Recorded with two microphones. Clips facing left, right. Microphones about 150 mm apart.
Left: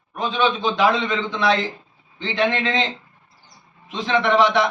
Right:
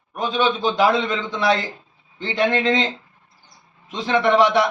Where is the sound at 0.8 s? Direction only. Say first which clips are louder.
Even; 10° right (ahead or behind).